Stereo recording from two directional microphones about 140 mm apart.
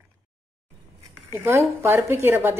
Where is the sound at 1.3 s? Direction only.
20° right (ahead or behind).